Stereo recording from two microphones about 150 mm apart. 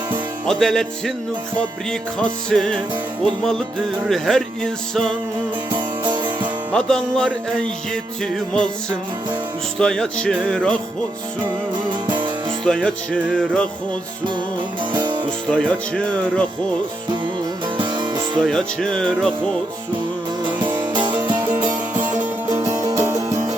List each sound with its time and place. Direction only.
0.6 s music: 5° left (ahead or behind)
2.5 s music: 5° left (ahead or behind)
4.1 s music: 5° left (ahead or behind)
6.7 s music: 5° left (ahead or behind)
9.7 s music: 5° left (ahead or behind)
11.4 s music: 30° right (ahead or behind)
12.6 s music: 5° left (ahead or behind)
14.9 s music: 30° right (ahead or behind)
15.4 s music: 5° left (ahead or behind)
17.7 s music: 30° right (ahead or behind)
18.4 s music: 5° left (ahead or behind)
20.7 s music: 30° right (ahead or behind)